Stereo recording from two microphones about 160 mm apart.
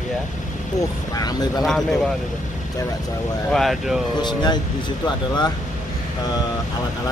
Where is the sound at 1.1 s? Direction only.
20° left (ahead or behind).